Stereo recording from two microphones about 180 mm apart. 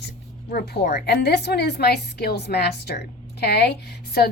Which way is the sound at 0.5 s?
65° left (ahead or behind).